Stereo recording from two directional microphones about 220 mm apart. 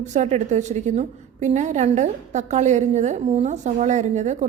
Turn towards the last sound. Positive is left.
turn(degrees=-30)  # may be behind; listen again after turning